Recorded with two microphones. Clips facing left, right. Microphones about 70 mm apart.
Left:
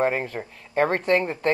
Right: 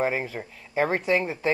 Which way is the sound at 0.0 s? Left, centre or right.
Centre.